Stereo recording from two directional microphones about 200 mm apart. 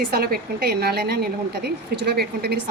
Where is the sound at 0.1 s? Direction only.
50° right (ahead or behind).